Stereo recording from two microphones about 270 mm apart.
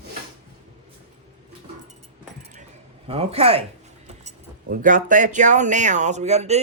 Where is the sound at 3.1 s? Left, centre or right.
Right.